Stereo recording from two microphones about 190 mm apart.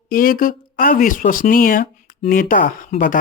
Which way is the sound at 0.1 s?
50° left (ahead or behind).